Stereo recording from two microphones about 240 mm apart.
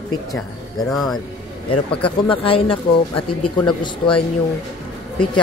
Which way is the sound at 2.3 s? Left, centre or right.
Left.